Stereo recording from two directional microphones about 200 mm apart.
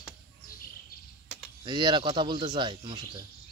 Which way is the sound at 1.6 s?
25° right (ahead or behind).